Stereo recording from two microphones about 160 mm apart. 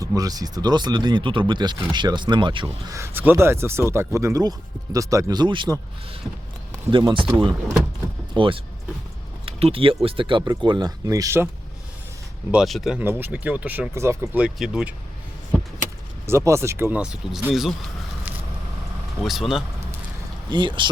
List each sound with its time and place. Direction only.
0.0 s speech: 20° right (ahead or behind)
6.9 s speech: 30° right (ahead or behind)
8.3 s speech: 35° right (ahead or behind)
12.5 s speech: centre (ahead or behind)
16.2 s speech: 15° right (ahead or behind)
19.2 s speech: centre (ahead or behind)
20.5 s speech: 30° right (ahead or behind)